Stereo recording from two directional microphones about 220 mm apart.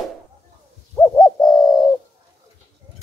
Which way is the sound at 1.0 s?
15° left (ahead or behind).